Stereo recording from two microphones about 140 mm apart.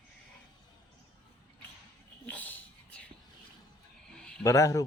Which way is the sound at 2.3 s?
10° left (ahead or behind).